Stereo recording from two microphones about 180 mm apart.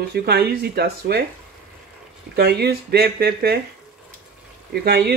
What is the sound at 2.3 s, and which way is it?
Speech, 60° right (ahead or behind).